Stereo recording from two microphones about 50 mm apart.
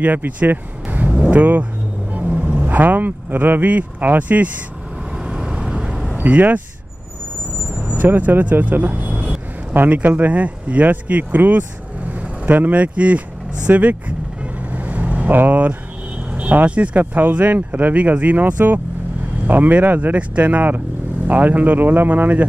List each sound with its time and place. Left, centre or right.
0.0 s speech: right
2.1 s vehicle: right
2.6 s speech: right
5.1 s vehicle: centre
6.1 s speech: right
7.7 s vehicle: right
9.8 s speech: right
13.7 s vehicle: right
15.3 s speech: right
20.1 s speech: right